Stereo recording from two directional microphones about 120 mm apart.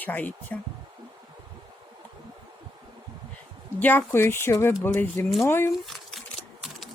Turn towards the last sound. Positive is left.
turn(degrees=0)  # may be behind; listen again after turning